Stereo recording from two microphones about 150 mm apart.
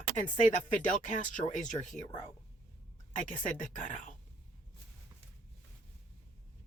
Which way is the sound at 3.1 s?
60° left (ahead or behind).